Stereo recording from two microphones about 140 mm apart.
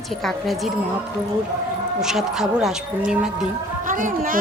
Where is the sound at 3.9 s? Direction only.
75° right (ahead or behind).